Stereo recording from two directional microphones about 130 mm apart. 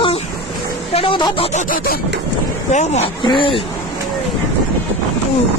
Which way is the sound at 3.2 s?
40° left (ahead or behind).